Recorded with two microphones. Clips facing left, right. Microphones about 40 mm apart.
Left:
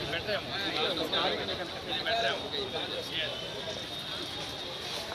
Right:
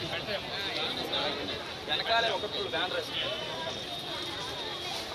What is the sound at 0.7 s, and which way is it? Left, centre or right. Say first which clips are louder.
Speech: left 4 dB; left.